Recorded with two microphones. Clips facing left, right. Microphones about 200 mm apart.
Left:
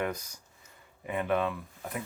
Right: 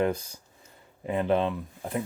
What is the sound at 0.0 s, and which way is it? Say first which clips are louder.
Speech: right 7 dB; 25° right (ahead or behind).